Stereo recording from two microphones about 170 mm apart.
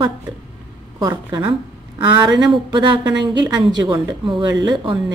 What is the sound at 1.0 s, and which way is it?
Speech, 25° right (ahead or behind).